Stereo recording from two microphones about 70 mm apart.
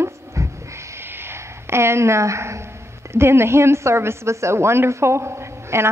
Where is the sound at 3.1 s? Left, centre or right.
Right.